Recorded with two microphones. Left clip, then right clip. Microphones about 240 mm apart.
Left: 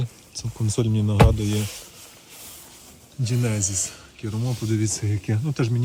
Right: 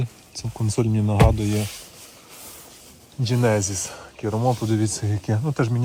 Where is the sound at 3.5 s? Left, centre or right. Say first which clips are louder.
Right 4 dB; right.